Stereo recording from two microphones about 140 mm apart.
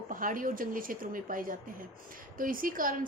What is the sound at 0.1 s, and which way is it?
A woman's voice, 75° right (ahead or behind).